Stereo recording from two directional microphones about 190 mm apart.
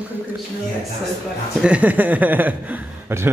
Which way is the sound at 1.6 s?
5° right (ahead or behind).